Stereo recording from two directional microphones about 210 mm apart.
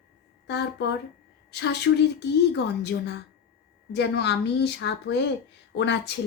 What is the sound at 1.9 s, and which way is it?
Speech, 70° left (ahead or behind).